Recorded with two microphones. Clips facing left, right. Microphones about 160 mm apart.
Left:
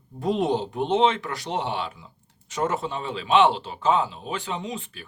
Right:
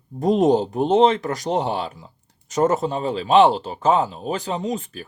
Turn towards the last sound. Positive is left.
turn(degrees=-40)  # may be behind; listen again after turning